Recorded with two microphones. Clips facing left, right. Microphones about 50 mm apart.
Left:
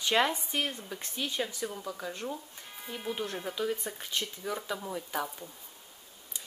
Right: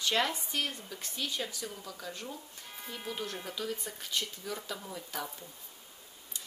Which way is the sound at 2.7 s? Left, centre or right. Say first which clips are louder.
Left 4 dB; centre.